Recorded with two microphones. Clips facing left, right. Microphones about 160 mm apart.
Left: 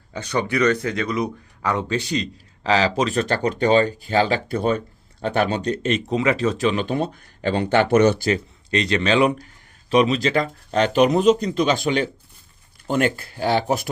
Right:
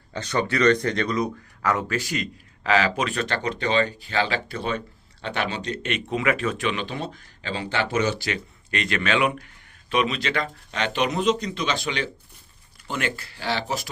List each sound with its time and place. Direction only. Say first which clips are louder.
0.1 s speech: left 2 dB; 10° left (ahead or behind)
2.0 s speech: left 4 dB; 30° left (ahead or behind)
6.1 s speech: left 2 dB; 30° left (ahead or behind); by 8.3 s 55° left (ahead or behind)
8.3 s speech: left 8 dB; 35° left (ahead or behind); by 13.9 s 50° left (ahead or behind)